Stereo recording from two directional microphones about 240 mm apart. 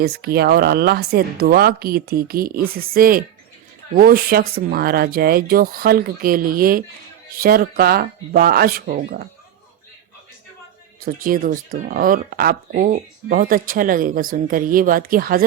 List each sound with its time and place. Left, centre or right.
0.0 s speech: right
11.0 s speech: right